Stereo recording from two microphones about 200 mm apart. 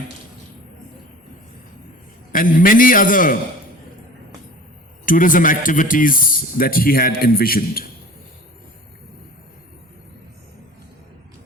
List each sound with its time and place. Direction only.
2.3 s speech: 45° left (ahead or behind)
5.0 s speech: 40° left (ahead or behind)